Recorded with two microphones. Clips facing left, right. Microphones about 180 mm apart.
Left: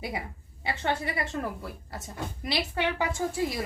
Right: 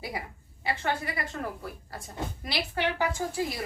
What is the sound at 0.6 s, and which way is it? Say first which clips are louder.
Speech: left 1 dB; 25° left (ahead or behind).